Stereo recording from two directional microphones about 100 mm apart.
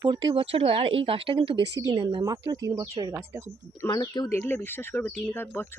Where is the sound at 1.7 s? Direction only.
40° right (ahead or behind).